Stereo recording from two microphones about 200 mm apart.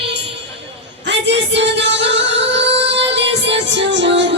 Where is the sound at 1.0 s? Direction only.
60° right (ahead or behind).